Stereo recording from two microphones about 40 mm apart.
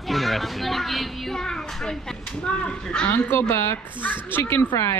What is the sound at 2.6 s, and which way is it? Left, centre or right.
Speech, left.